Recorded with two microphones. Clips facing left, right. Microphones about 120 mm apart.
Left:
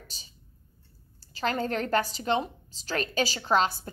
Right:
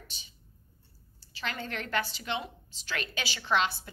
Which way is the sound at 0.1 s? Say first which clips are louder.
Even; 40° left (ahead or behind).